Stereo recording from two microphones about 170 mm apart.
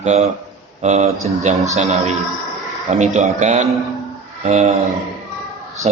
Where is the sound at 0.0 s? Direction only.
40° right (ahead or behind).